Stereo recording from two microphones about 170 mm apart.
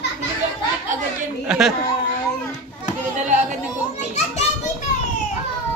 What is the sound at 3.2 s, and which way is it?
Speech, 45° right (ahead or behind).